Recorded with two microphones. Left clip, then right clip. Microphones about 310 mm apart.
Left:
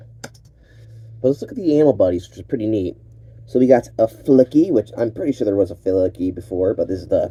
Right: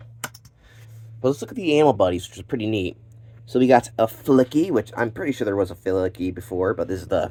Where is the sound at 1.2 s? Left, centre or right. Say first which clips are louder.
Left 4 dB; centre.